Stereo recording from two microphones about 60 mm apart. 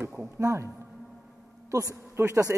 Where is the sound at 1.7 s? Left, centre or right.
Right.